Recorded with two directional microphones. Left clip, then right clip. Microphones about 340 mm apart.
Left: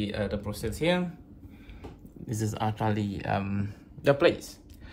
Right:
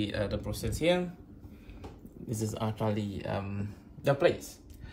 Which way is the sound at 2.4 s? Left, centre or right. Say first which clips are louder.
Left 4 dB; left.